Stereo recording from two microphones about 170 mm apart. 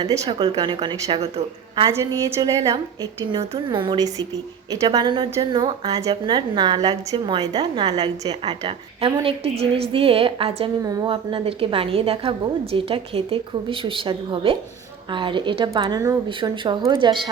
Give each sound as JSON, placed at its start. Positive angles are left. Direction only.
{"t": 0.0, "sound": "a woman's voice", "side_deg": -30}
{"t": 1.9, "sound": "a woman's voice", "side_deg": -15}